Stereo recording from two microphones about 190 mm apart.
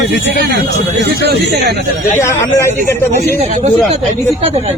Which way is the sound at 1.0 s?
60° right (ahead or behind).